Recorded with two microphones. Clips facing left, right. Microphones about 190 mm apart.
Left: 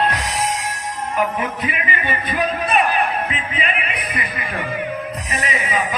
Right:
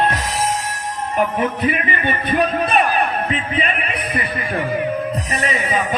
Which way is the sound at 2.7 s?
35° right (ahead or behind).